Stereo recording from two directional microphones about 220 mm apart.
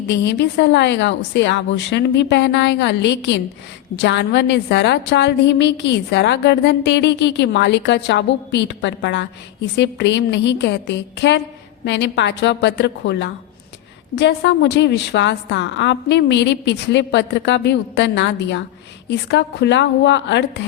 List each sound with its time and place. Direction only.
0.1 s a woman's voice: 50° left (ahead or behind)